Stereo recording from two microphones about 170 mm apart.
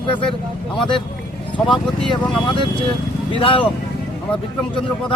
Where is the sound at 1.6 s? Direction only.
5° left (ahead or behind).